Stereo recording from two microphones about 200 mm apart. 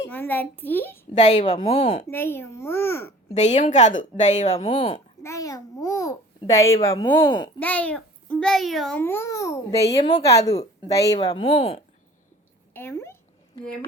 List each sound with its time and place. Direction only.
0.1 s a child's voice: 10° left (ahead or behind)
1.1 s a woman's voice: 35° left (ahead or behind)
2.0 s a child's voice: 10° left (ahead or behind)
3.3 s a woman's voice: 35° left (ahead or behind)
4.6 s a child's voice: 25° left (ahead or behind)
7.6 s a child's voice: 5° left (ahead or behind)
10.0 s a woman's voice: 35° left (ahead or behind)
10.9 s speech: 15° left (ahead or behind)
12.7 s speech: 10° left (ahead or behind)